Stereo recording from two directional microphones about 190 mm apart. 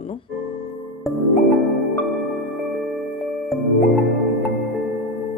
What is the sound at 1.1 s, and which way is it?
Music, centre (ahead or behind).